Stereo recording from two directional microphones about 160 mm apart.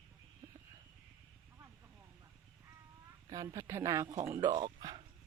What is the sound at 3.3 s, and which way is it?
Speech, 20° right (ahead or behind).